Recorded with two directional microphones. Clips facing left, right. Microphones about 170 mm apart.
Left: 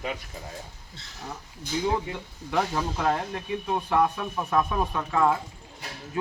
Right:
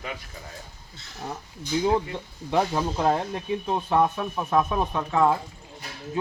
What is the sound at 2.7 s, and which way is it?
Speech, 20° right (ahead or behind).